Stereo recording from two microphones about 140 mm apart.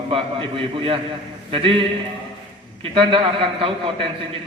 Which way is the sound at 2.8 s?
40° right (ahead or behind).